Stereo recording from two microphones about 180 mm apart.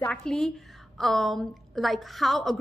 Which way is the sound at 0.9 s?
Centre (ahead or behind).